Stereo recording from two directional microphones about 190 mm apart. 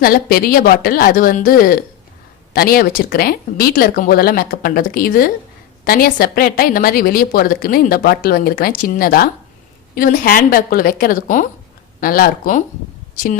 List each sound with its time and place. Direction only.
0.0 s speech: 50° left (ahead or behind)